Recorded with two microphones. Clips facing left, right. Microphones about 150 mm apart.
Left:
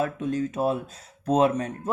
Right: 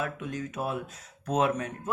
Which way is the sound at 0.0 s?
30° left (ahead or behind).